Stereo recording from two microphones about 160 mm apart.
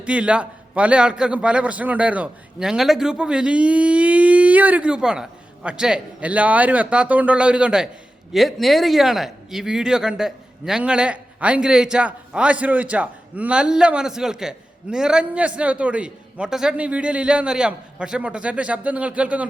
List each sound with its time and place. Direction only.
0.0 s speech: 5° right (ahead or behind)